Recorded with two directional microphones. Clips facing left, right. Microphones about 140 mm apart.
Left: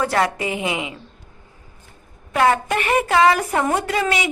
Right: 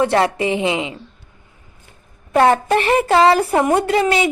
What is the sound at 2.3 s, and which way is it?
A woman's voice, 30° right (ahead or behind).